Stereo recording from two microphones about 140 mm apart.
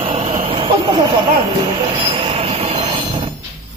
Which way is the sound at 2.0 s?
40° right (ahead or behind).